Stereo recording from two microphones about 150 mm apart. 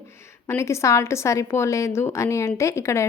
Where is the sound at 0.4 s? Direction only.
20° left (ahead or behind).